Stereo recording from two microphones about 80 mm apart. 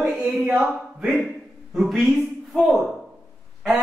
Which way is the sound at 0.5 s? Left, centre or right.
Right.